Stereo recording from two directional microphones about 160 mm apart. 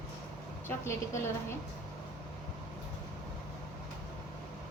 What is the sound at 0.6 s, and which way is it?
Speech, 15° left (ahead or behind).